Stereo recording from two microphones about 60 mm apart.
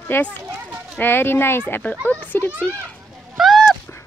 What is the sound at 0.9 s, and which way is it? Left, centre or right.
Speech, left.